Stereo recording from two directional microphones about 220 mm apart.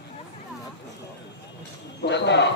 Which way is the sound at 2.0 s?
50° left (ahead or behind).